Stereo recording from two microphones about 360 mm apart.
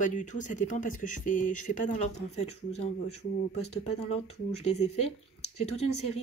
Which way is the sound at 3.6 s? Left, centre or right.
Centre.